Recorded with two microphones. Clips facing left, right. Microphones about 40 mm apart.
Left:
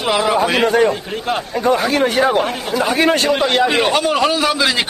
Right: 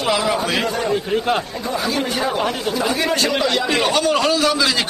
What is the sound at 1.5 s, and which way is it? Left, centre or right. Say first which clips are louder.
A man's voice: left 6 dB; left.